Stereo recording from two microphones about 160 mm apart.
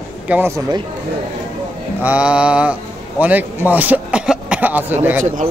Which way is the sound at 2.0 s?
5° right (ahead or behind).